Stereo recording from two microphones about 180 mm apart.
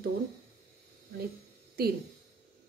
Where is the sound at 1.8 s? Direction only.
55° right (ahead or behind).